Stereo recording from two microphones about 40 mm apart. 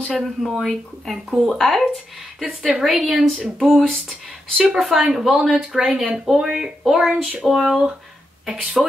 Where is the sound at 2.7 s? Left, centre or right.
Right.